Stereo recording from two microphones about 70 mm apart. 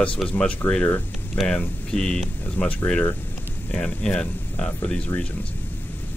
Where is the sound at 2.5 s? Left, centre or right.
Left.